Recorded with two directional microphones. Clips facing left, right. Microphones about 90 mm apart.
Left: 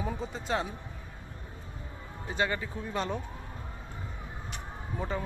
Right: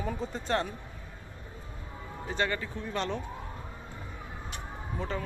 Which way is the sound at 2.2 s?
10° left (ahead or behind).